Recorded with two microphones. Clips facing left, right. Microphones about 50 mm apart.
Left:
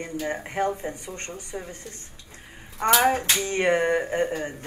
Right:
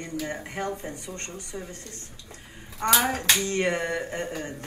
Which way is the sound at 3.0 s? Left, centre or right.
Left.